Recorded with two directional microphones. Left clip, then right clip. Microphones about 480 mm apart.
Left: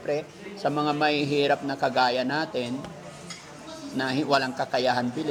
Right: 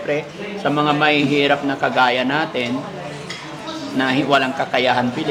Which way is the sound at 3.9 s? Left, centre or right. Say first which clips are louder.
Right 8 dB; left.